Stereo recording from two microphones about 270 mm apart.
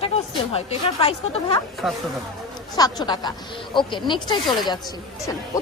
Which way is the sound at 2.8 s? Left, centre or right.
Centre.